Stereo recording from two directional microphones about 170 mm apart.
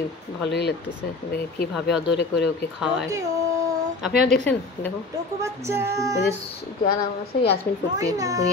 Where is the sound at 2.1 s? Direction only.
75° left (ahead or behind).